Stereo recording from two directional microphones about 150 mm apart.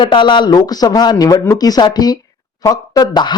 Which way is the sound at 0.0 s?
30° left (ahead or behind).